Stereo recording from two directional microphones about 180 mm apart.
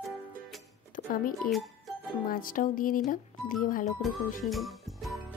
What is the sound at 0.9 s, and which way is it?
Speech, 50° left (ahead or behind).